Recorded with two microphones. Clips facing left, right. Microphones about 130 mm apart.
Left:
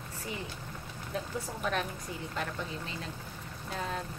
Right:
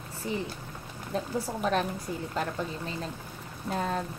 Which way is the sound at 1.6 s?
35° right (ahead or behind).